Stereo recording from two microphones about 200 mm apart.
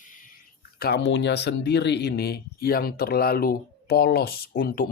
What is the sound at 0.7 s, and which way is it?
Speech, 50° left (ahead or behind).